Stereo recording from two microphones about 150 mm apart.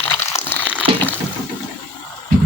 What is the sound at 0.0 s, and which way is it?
Crumpling, 15° left (ahead or behind).